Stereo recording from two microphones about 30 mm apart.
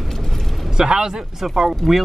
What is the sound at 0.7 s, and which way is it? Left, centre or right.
Speech, centre.